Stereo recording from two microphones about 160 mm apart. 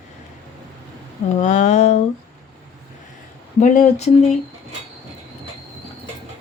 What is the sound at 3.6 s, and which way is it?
Speech, 50° left (ahead or behind).